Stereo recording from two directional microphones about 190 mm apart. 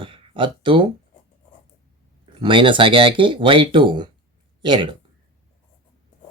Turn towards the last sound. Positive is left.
turn(degrees=-25)  # may be behind; listen again after turning